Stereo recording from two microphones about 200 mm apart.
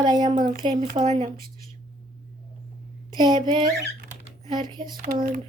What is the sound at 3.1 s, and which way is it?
A child's voice, 20° right (ahead or behind).